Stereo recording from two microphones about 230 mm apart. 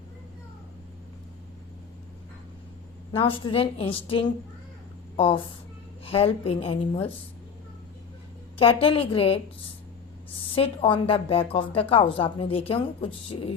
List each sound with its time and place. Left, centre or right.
3.1 s a woman's voice: left
8.5 s a woman's voice: left